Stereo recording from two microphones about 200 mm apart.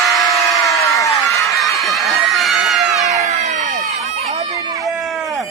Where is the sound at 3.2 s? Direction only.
35° right (ahead or behind).